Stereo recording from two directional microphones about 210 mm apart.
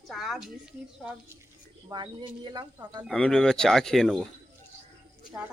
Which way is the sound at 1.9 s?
20° right (ahead or behind).